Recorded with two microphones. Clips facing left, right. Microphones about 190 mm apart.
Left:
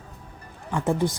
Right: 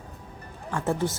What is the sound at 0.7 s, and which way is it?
Speech, 15° left (ahead or behind).